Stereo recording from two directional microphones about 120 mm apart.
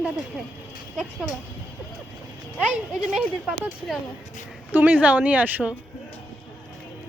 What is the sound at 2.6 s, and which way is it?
Speech, 10° right (ahead or behind).